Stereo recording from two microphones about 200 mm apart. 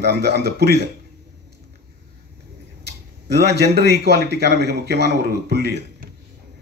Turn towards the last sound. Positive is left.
turn(degrees=-55)  # may be behind; listen again after turning